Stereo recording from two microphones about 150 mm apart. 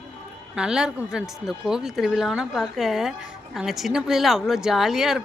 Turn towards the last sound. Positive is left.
turn(degrees=-5)  # may be behind; listen again after turning